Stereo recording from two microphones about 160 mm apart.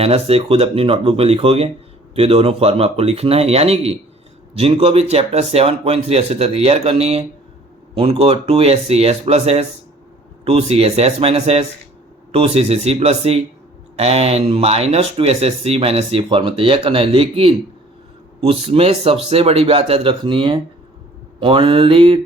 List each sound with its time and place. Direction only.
0.0 s speech: 40° right (ahead or behind)